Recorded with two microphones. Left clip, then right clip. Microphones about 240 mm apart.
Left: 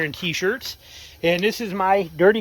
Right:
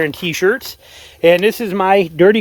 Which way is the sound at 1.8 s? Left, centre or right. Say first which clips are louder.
Right 6 dB; right.